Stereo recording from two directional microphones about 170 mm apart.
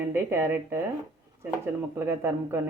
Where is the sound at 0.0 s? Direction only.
15° right (ahead or behind).